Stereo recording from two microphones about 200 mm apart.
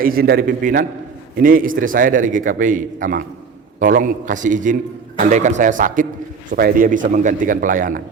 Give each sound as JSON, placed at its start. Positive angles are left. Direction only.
{"t": 0.0, "sound": "a man's voice", "side_deg": -45}